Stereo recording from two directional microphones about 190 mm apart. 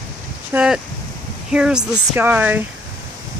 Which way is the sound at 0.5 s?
5° right (ahead or behind).